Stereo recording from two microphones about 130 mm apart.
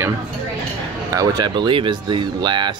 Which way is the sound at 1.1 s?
30° right (ahead or behind).